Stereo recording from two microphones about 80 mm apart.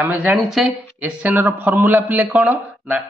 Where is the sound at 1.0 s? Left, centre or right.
Centre.